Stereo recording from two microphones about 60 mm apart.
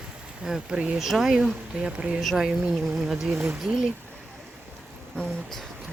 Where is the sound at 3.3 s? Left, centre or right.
Right.